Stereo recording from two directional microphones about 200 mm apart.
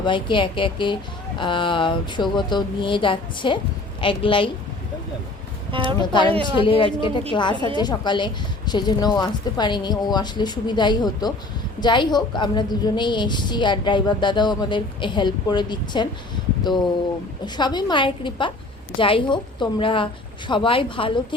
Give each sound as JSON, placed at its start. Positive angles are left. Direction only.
{"t": 0.0, "sound": "a woman's voice", "side_deg": 25}
{"t": 5.7, "sound": "a woman's voice", "side_deg": -25}
{"t": 6.0, "sound": "a woman's voice", "side_deg": 20}